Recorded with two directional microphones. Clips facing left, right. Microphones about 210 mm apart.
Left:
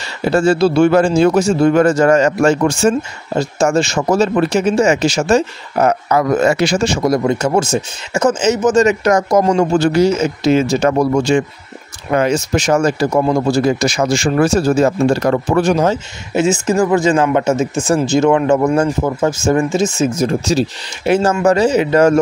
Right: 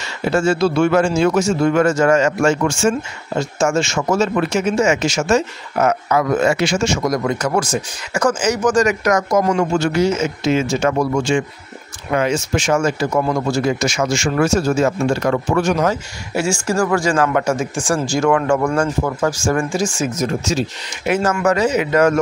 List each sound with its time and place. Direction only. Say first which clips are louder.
0.2 s a man's voice: left 4 dB; 35° left (ahead or behind)